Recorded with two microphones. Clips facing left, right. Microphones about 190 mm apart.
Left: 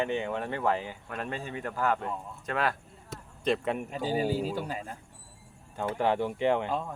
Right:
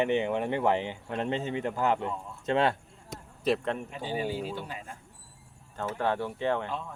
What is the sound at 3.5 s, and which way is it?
Speech, 5° right (ahead or behind).